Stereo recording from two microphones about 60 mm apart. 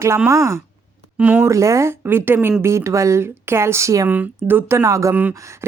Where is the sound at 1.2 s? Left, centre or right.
Right.